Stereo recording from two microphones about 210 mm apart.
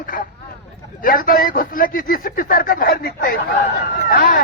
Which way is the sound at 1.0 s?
40° left (ahead or behind).